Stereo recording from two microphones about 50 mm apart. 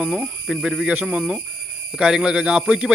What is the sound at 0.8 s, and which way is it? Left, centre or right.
A man's voice, right.